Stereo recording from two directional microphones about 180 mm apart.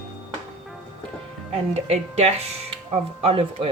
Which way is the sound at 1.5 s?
35° right (ahead or behind).